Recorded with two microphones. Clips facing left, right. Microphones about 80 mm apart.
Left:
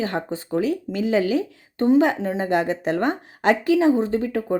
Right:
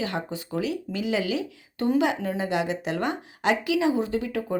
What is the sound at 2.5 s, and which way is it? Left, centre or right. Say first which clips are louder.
A woman's voice: left 5 dB; left.